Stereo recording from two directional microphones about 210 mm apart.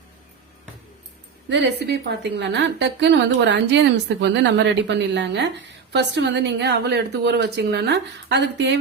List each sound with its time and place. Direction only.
1.5 s a woman's voice: 55° right (ahead or behind)